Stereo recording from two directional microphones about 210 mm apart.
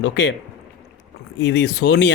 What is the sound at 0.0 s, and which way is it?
Speech, 55° left (ahead or behind).